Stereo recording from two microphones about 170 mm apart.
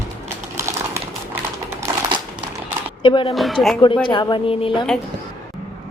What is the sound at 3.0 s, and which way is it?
Speech, 30° left (ahead or behind).